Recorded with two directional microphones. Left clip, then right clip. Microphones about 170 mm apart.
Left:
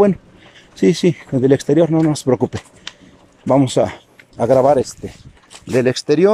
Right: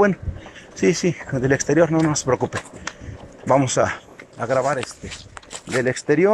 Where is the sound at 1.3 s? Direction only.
30° left (ahead or behind).